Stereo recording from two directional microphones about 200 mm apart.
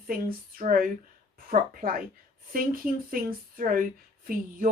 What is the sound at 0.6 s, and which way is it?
A woman's voice, 40° right (ahead or behind).